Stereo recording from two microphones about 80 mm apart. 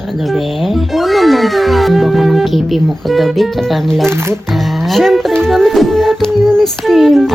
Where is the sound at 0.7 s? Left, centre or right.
Centre.